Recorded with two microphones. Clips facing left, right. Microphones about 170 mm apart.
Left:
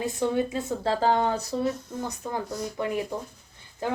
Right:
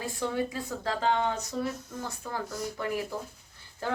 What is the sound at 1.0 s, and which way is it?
Speech, 35° left (ahead or behind).